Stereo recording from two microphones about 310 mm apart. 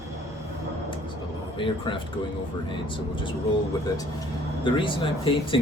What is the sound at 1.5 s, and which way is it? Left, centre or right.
Speech, centre.